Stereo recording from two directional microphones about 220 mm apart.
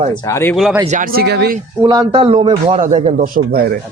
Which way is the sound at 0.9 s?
45° right (ahead or behind).